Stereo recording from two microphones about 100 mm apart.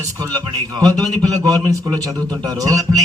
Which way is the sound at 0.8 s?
40° right (ahead or behind).